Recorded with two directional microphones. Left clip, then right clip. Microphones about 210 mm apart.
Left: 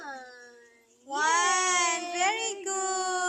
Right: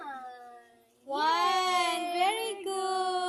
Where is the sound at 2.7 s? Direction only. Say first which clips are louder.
Even; 20° left (ahead or behind).